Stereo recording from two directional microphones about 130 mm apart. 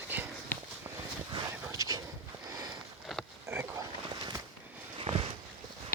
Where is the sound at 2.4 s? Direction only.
30° right (ahead or behind).